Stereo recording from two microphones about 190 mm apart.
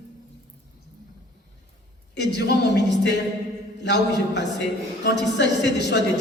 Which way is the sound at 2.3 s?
65° left (ahead or behind).